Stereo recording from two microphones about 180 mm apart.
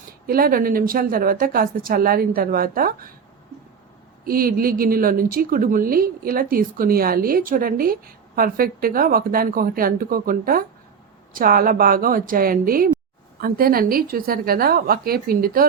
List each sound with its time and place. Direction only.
0.3 s a woman's voice: 55° right (ahead or behind)
4.3 s a woman's voice: 55° right (ahead or behind)